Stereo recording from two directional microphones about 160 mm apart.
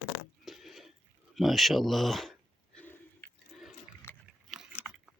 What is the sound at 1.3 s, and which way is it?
Speech, centre (ahead or behind).